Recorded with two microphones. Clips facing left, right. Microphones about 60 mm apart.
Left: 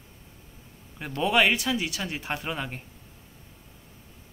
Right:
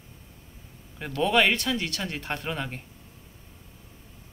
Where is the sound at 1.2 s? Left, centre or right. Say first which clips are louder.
Even; centre.